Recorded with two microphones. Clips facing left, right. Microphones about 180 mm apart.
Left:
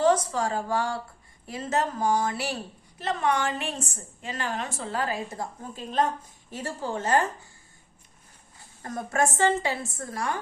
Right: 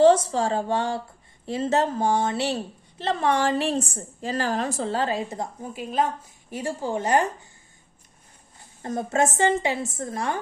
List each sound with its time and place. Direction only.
0.0 s a woman's voice: 30° right (ahead or behind)
8.8 s a woman's voice: 25° right (ahead or behind)